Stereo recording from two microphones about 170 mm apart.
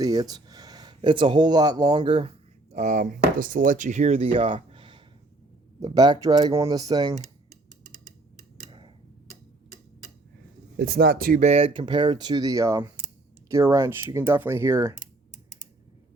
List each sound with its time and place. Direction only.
0.0 s speech: 20° right (ahead or behind)
2.7 s speech: 45° right (ahead or behind); by 7.2 s 20° right (ahead or behind)
10.8 s speech: 60° right (ahead or behind)
11.4 s speech: 35° right (ahead or behind); by 14.9 s 15° right (ahead or behind)